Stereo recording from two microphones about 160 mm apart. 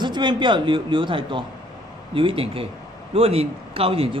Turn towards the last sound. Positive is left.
turn(degrees=-35)  # may be behind; listen again after turning